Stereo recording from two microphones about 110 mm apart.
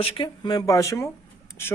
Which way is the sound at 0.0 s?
45° left (ahead or behind).